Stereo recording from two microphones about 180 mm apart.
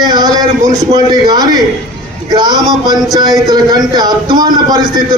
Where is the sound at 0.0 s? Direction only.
25° right (ahead or behind).